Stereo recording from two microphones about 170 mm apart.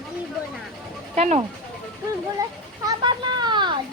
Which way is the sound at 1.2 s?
40° right (ahead or behind).